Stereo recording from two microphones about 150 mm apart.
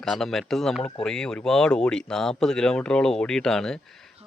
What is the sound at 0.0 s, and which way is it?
Speech, centre (ahead or behind).